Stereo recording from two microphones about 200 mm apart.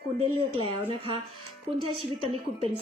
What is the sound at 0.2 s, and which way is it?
A woman's voice, 30° right (ahead or behind).